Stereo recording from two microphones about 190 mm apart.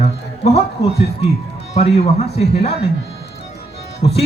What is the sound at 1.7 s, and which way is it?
Speech, 30° left (ahead or behind).